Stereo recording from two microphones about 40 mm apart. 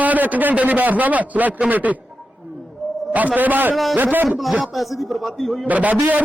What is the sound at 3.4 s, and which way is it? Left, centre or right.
Speech, right.